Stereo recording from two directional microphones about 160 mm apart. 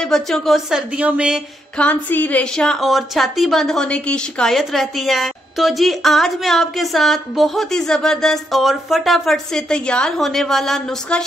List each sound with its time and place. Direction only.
0.0 s a woman's voice: 5° left (ahead or behind)
1.8 s a woman's voice: 10° left (ahead or behind)